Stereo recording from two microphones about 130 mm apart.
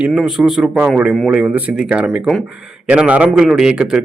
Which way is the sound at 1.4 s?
10° right (ahead or behind).